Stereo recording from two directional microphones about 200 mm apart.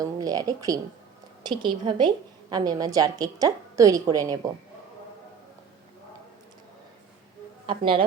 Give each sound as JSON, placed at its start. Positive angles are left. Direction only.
{"t": 0.0, "sound": "a woman's voice", "side_deg": -20}
{"t": 7.7, "sound": "a woman's voice", "side_deg": -25}